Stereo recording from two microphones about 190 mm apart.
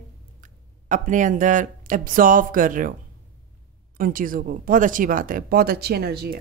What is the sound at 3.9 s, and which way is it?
Speech, 45° right (ahead or behind).